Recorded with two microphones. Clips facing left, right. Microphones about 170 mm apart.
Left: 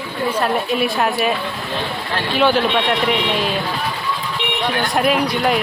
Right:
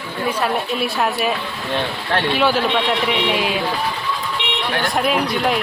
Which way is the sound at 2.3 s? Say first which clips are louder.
Left 4 dB; 5° right (ahead or behind).